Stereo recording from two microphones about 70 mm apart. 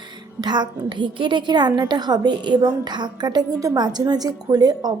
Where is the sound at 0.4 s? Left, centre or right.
Right.